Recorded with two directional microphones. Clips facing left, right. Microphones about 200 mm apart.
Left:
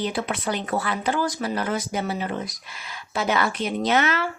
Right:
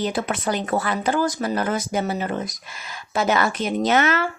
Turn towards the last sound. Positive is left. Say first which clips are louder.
# right 3 dB
turn(degrees=-50)  # may be behind; listen again after turning